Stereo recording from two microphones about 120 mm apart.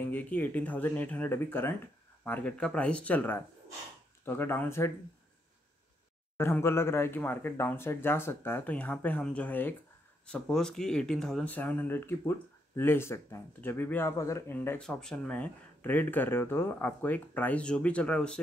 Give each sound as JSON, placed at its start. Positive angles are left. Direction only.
{"t": 0.1, "sound": "speech", "side_deg": 15}
{"t": 6.3, "sound": "speech", "side_deg": 20}
{"t": 14.8, "sound": "speech", "side_deg": 5}